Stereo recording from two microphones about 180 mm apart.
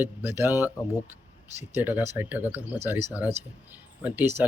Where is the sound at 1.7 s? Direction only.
10° right (ahead or behind).